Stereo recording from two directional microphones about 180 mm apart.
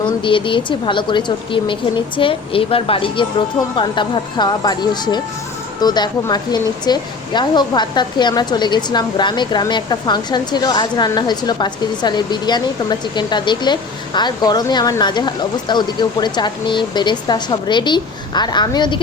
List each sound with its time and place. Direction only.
0.0 s a woman's voice: 30° left (ahead or behind)